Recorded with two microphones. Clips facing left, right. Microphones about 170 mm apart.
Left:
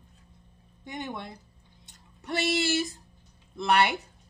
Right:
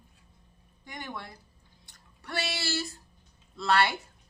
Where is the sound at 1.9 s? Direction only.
20° left (ahead or behind).